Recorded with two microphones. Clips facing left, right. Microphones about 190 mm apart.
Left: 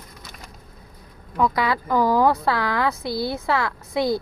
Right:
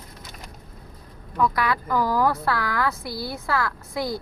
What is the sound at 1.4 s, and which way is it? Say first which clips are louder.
Speech: left 2 dB; 25° left (ahead or behind).